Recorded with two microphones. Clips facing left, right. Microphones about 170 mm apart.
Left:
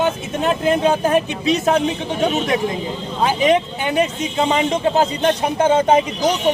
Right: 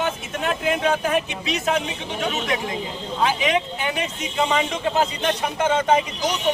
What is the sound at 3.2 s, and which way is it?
Speech, 40° left (ahead or behind).